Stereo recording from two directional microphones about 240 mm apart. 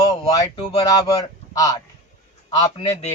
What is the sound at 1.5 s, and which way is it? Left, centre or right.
Speech, centre.